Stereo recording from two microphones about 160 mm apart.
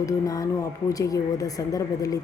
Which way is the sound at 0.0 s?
20° left (ahead or behind).